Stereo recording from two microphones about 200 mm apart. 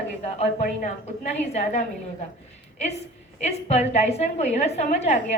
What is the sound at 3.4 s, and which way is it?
A woman's voice, 35° left (ahead or behind).